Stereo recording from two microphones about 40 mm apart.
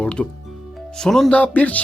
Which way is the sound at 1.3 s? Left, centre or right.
Left.